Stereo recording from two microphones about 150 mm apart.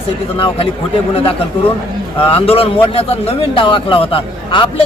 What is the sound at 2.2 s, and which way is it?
A man's voice, 40° left (ahead or behind).